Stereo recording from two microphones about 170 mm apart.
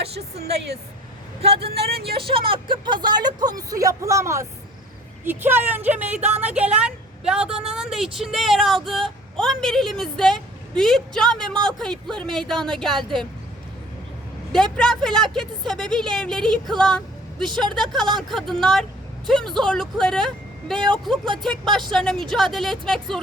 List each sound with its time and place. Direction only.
1.4 s speech: 35° right (ahead or behind)
1.7 s speech: 70° right (ahead or behind)
2.1 s a woman's voice: 30° right (ahead or behind); by 13.2 s 5° left (ahead or behind)
14.8 s speech: 5° left (ahead or behind)
17.8 s speech: 25° right (ahead or behind)
18.2 s speech: centre (ahead or behind)